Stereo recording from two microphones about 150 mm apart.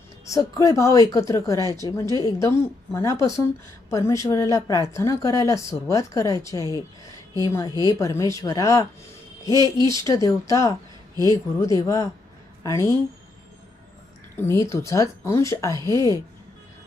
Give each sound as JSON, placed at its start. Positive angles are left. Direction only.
{"t": 0.3, "sound": "a woman's voice", "side_deg": 20}
{"t": 1.5, "sound": "a woman's voice", "side_deg": -25}
{"t": 1.8, "sound": "a woman's voice", "side_deg": 20}
{"t": 10.1, "sound": "a woman's voice", "side_deg": 20}
{"t": 14.3, "sound": "a woman's voice", "side_deg": 20}